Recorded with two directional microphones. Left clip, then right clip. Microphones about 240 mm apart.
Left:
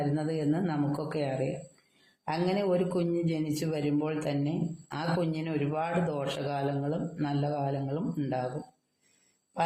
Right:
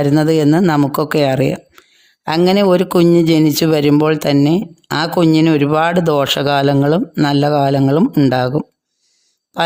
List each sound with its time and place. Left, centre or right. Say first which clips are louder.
0.2 s a man's voice: right 18 dB; right